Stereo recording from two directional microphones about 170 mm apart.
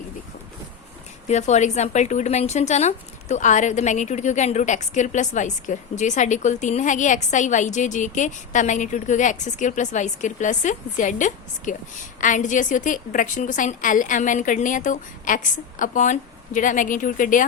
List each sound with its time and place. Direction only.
1.3 s a woman's voice: 45° left (ahead or behind)